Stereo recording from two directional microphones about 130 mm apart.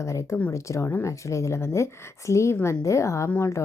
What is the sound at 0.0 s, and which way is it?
A woman's voice, 25° left (ahead or behind).